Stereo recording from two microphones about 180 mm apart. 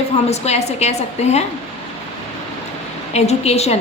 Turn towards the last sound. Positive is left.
turn(degrees=35)  # may be behind; listen again after turning